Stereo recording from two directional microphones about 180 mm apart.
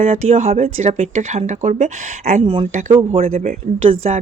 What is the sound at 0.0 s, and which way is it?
Speech, 35° right (ahead or behind).